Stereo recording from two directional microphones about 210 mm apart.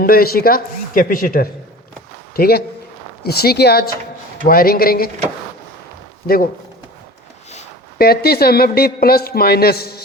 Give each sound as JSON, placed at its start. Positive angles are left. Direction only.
{"t": 0.0, "sound": "a man's voice", "side_deg": 45}
{"t": 6.2, "sound": "a man's voice", "side_deg": 45}
{"t": 7.9, "sound": "a man's voice", "side_deg": 45}